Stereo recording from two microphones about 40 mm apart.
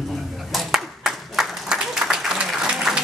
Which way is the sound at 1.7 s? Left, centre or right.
Centre.